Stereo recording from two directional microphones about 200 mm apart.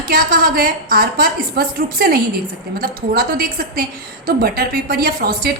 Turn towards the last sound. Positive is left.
turn(degrees=-50)  # may be behind; listen again after turning